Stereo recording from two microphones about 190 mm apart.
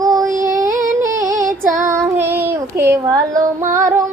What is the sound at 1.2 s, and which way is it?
Female singing, 45° right (ahead or behind).